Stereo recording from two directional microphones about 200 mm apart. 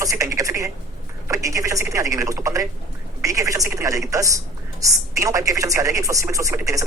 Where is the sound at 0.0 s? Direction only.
15° right (ahead or behind).